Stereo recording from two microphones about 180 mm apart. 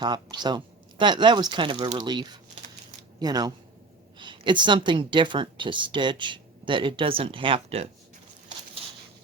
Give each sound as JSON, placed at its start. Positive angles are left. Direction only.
{"t": 0.0, "sound": "speech", "side_deg": -25}